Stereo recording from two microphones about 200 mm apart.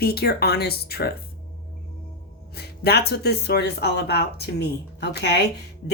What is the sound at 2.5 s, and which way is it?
Speech, 55° left (ahead or behind).